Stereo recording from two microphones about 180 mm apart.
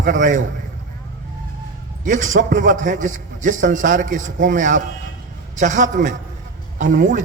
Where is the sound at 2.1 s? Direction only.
45° right (ahead or behind).